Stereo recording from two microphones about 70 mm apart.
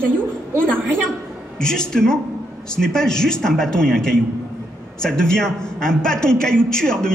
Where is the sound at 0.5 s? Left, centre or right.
Centre.